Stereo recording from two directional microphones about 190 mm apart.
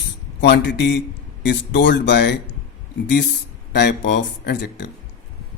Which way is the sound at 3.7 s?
60° left (ahead or behind).